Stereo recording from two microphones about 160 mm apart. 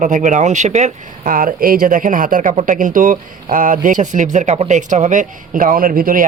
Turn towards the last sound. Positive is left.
turn(degrees=-60)  # may be behind; listen again after turning